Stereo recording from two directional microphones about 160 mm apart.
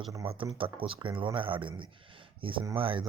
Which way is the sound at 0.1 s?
30° right (ahead or behind).